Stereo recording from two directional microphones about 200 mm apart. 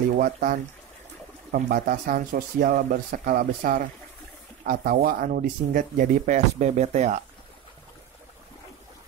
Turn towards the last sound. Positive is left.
turn(degrees=-35)  # may be behind; listen again after turning